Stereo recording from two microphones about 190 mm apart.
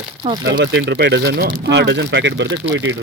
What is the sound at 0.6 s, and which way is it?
Speech, 65° right (ahead or behind).